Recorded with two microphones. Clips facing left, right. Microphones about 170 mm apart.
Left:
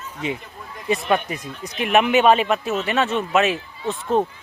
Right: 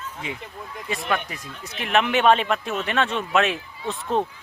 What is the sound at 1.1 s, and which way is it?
Speech, 20° left (ahead or behind).